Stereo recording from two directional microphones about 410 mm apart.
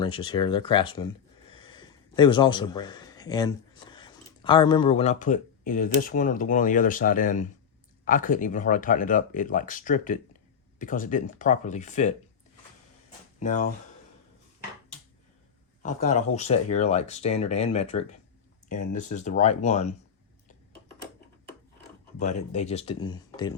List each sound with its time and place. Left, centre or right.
0.0 s speech: centre
13.4 s speech: centre
15.8 s speech: centre
22.2 s speech: centre